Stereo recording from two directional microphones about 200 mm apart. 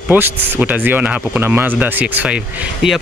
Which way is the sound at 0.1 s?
10° right (ahead or behind).